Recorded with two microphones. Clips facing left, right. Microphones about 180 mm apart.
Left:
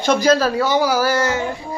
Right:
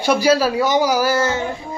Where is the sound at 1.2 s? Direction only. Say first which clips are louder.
Even; 25° right (ahead or behind).